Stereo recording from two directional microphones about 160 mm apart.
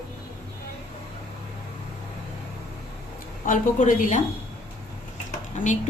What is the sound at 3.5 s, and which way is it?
Speech, 50° left (ahead or behind).